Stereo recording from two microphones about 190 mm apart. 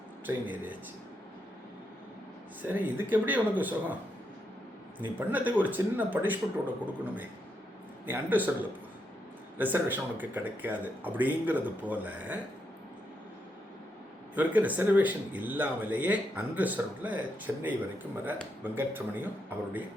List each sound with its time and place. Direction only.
0.3 s speech: 10° right (ahead or behind)
2.6 s speech: 10° right (ahead or behind)
4.9 s speech: 10° right (ahead or behind)
9.6 s speech: 10° right (ahead or behind)
14.3 s speech: 10° right (ahead or behind)